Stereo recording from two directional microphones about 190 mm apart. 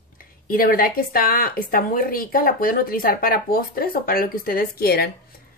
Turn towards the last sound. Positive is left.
turn(degrees=55)  # may be behind; listen again after turning